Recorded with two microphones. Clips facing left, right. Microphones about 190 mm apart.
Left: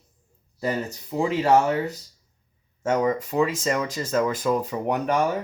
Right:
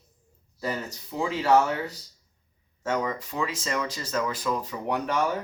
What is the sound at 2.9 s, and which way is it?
Speech, 40° left (ahead or behind).